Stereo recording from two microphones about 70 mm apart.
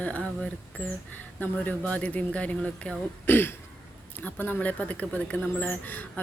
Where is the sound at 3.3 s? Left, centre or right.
Left.